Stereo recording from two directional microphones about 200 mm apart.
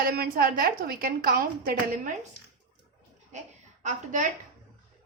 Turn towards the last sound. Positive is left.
turn(degrees=-40)  # may be behind; listen again after turning